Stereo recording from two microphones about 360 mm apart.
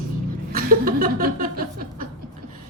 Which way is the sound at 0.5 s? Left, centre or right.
Right.